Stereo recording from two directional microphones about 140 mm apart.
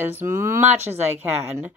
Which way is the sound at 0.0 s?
15° right (ahead or behind).